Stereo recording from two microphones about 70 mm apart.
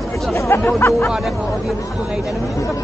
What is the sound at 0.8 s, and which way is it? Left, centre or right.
Speech, left.